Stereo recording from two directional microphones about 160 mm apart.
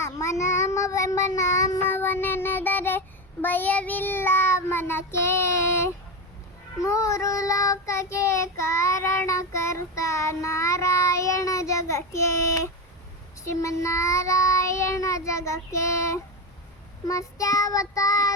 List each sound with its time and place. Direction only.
0.0 s child singing: 20° left (ahead or behind)